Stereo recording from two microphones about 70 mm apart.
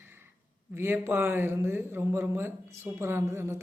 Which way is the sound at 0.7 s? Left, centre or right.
Right.